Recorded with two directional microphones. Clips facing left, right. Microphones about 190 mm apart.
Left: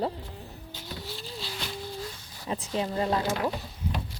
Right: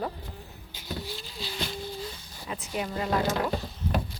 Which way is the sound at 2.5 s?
30° left (ahead or behind).